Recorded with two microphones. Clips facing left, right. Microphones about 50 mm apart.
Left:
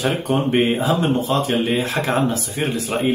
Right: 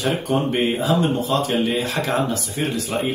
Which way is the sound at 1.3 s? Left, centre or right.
Centre.